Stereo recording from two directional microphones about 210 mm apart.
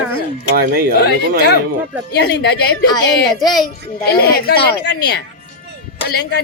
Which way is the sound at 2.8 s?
20° left (ahead or behind).